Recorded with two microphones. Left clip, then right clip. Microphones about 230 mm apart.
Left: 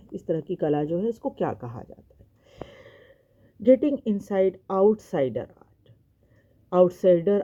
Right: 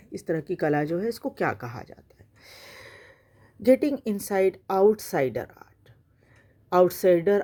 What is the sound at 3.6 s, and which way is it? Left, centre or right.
Speech, right.